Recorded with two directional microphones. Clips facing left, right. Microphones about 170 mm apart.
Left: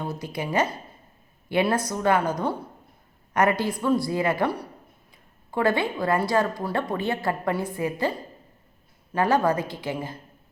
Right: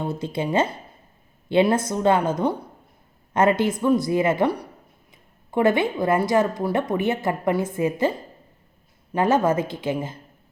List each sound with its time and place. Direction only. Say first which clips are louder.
0.0 s speech: right 5 dB; 25° right (ahead or behind)
9.1 s speech: right 2 dB; 20° right (ahead or behind)